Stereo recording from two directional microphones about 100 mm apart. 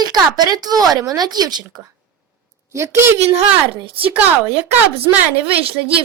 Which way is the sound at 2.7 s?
30° right (ahead or behind).